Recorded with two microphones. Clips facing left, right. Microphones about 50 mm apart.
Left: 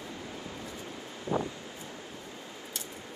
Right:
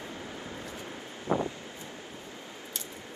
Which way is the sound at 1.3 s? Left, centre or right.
Right.